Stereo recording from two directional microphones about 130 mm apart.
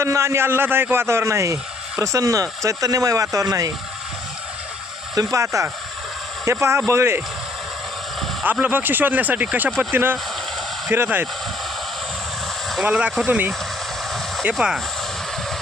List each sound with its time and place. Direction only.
0.0 s a man's voice: 20° right (ahead or behind)
5.1 s a man's voice: 25° right (ahead or behind)
8.6 s speech: 15° right (ahead or behind)
12.6 s speech: 5° right (ahead or behind)
14.5 s speech: 5° right (ahead or behind)